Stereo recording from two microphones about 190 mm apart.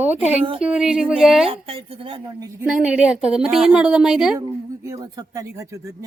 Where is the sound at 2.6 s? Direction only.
5° right (ahead or behind).